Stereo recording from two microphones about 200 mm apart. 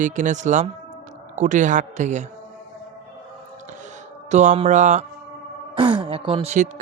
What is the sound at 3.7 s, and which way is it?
Music, 35° right (ahead or behind).